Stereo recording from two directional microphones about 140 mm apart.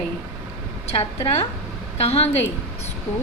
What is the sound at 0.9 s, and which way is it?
A woman's voice, 45° left (ahead or behind).